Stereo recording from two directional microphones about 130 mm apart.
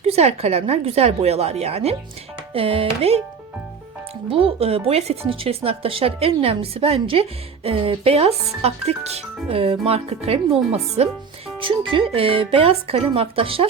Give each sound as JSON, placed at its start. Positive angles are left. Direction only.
{"t": 0.0, "sound": "speech", "side_deg": -55}
{"t": 4.3, "sound": "speech", "side_deg": -45}
{"t": 11.6, "sound": "speech", "side_deg": -40}